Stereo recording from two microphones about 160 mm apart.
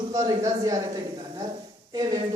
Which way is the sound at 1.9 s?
25° right (ahead or behind).